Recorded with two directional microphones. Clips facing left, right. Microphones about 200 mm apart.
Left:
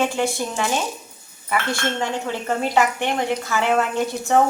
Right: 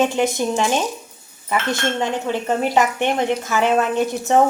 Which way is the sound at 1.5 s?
20° right (ahead or behind).